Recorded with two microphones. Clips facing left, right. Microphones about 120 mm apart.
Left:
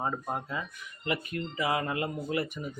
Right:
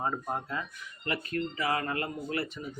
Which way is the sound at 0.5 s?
10° left (ahead or behind).